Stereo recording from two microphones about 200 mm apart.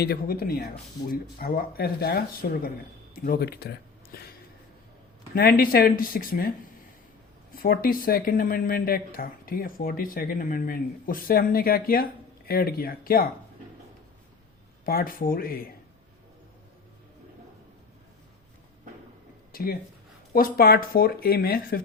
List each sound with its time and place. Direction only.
0.0 s speech: 50° left (ahead or behind)
5.3 s speech: 50° left (ahead or behind)
7.5 s speech: 45° left (ahead or behind)
14.8 s speech: 45° left (ahead or behind)
20.3 s speech: 50° left (ahead or behind)